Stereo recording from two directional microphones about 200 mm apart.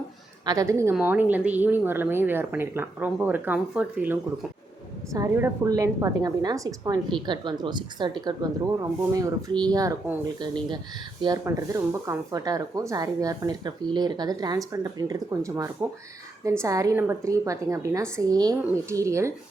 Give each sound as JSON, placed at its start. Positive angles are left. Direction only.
{"t": 0.4, "sound": "a woman's voice", "side_deg": -15}